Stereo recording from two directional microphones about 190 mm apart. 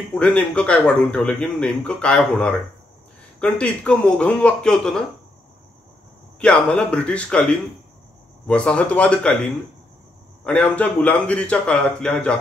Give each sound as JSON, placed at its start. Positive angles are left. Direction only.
{"t": 0.1, "sound": "speech", "side_deg": 5}
{"t": 6.4, "sound": "speech", "side_deg": 5}
{"t": 10.4, "sound": "speech", "side_deg": 5}